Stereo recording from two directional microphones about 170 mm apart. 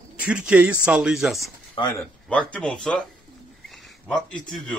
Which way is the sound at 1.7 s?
25° left (ahead or behind).